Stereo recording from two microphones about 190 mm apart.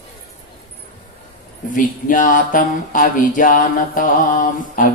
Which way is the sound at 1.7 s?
45° left (ahead or behind).